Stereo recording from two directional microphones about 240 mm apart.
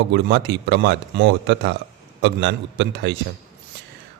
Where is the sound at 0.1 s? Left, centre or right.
Right.